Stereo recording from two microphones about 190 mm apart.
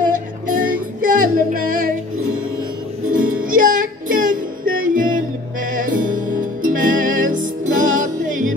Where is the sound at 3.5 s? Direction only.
45° right (ahead or behind).